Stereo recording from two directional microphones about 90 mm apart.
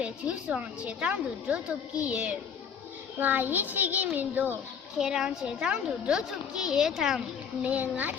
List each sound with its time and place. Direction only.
0.0 s a child's voice: 15° right (ahead or behind)
4.9 s a child's voice: 10° right (ahead or behind)
7.6 s a child's voice: 15° right (ahead or behind)